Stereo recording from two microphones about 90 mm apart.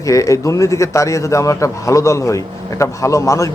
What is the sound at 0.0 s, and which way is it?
Speech, 35° left (ahead or behind).